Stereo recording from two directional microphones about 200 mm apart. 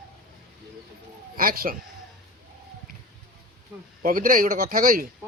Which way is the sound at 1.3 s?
45° right (ahead or behind).